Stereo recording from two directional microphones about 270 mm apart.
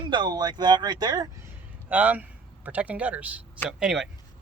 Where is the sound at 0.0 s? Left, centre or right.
Centre.